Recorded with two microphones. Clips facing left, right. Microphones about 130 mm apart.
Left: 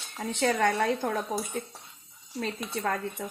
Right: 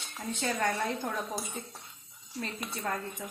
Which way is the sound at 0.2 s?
75° left (ahead or behind).